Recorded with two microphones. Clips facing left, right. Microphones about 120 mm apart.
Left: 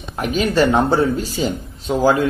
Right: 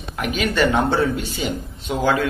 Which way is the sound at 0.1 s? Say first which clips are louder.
Left 4 dB; 35° left (ahead or behind).